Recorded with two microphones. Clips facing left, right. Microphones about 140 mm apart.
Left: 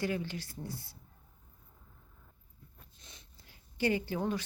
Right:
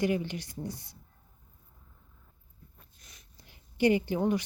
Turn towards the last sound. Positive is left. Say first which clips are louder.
# right 6 dB
turn(degrees=-15)  # may be behind; listen again after turning